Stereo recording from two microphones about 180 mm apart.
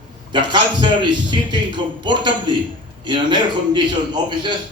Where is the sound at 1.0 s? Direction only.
25° right (ahead or behind).